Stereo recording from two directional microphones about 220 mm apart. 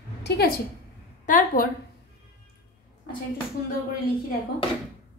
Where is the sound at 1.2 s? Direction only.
40° left (ahead or behind).